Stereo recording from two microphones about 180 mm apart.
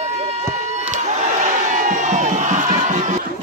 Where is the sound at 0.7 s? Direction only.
40° right (ahead or behind).